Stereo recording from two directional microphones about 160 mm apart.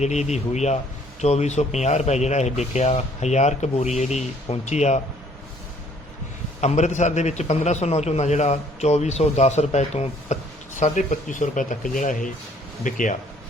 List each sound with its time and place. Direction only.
0.0 s speech: 45° left (ahead or behind)
6.6 s speech: 45° left (ahead or behind)